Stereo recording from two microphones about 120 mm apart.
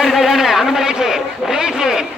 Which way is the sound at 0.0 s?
Centre (ahead or behind).